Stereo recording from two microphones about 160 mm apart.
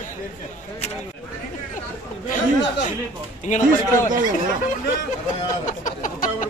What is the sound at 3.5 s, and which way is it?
Speech, 50° left (ahead or behind).